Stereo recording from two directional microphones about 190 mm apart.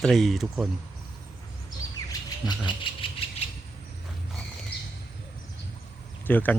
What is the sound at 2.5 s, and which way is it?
Speech, 25° left (ahead or behind).